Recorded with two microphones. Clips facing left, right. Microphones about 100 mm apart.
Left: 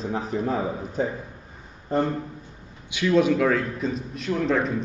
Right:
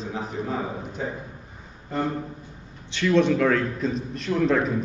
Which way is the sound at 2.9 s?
10° left (ahead or behind).